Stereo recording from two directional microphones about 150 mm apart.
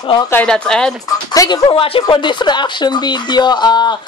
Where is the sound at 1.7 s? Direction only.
40° left (ahead or behind).